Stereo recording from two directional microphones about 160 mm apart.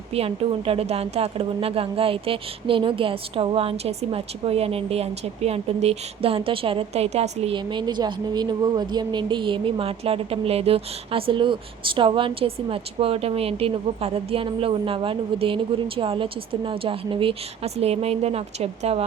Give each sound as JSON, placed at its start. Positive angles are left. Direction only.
{"t": 0.1, "sound": "a woman's voice", "side_deg": -40}